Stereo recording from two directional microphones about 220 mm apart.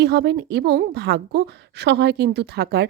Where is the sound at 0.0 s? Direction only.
50° right (ahead or behind).